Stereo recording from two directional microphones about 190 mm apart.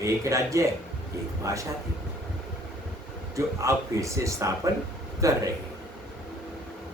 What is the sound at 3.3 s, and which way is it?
Speech, 15° right (ahead or behind).